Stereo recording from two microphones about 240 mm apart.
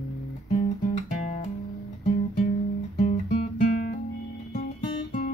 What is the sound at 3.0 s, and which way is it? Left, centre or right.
Guitar, left.